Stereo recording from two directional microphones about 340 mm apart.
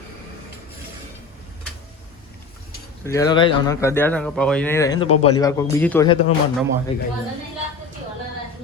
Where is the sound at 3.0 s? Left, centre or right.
Centre.